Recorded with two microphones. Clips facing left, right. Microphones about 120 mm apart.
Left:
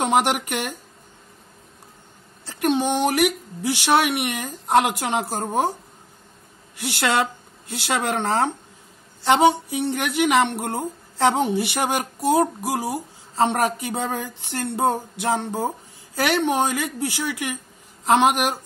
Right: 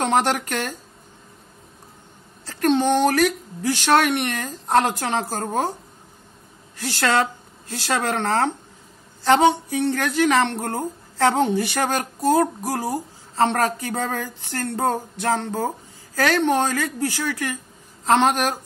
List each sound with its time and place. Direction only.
0.0 s a woman's voice: 10° left (ahead or behind)
2.4 s a woman's voice: 15° left (ahead or behind)
6.8 s a woman's voice: 15° left (ahead or behind)